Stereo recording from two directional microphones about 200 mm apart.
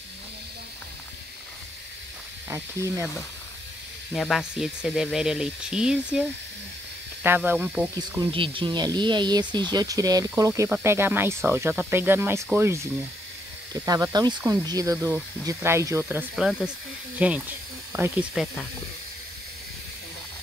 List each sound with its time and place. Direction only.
2.5 s speech: 15° right (ahead or behind)
4.1 s speech: centre (ahead or behind)
7.2 s speech: 10° right (ahead or behind)
8.3 s speech: 25° right (ahead or behind)
13.8 s speech: 20° right (ahead or behind); by 18.7 s centre (ahead or behind)